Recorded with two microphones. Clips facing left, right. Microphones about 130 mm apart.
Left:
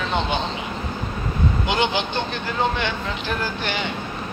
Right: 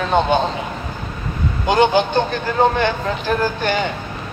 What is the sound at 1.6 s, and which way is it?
Speech, 45° right (ahead or behind).